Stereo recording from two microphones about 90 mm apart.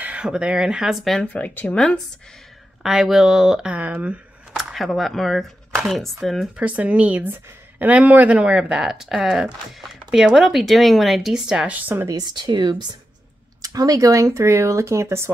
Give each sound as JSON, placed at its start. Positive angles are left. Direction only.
{"t": 0.0, "sound": "speech", "side_deg": -15}
{"t": 1.2, "sound": "speech", "side_deg": 20}
{"t": 2.8, "sound": "speech", "side_deg": -5}
{"t": 3.7, "sound": "speech", "side_deg": -15}
{"t": 4.6, "sound": "speech", "side_deg": 0}
{"t": 6.5, "sound": "speech", "side_deg": -15}
{"t": 12.1, "sound": "speech", "side_deg": -50}
{"t": 13.6, "sound": "speech", "side_deg": -40}